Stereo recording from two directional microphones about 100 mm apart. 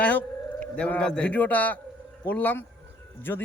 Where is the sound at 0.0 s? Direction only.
15° left (ahead or behind).